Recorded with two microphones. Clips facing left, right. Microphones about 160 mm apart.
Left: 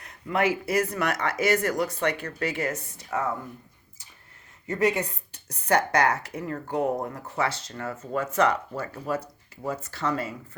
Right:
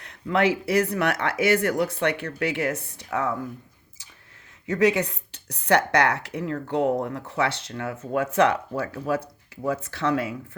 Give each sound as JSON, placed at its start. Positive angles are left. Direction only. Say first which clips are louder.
{"t": 0.0, "sound": "speech", "louder": "right 3 dB", "side_deg": -70}
{"t": 4.6, "sound": "a woman's voice", "louder": "right 4 dB", "side_deg": -85}